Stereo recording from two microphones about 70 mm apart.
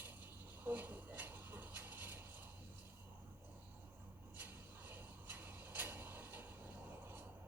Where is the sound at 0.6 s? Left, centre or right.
Right.